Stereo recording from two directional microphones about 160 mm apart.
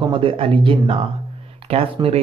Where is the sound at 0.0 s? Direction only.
30° right (ahead or behind).